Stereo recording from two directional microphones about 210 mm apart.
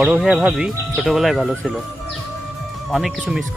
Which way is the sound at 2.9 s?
Centre (ahead or behind).